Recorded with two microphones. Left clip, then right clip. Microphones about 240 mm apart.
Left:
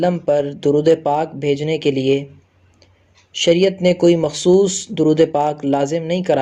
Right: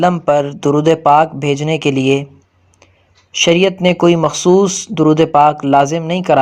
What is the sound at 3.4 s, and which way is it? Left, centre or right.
Speech, right.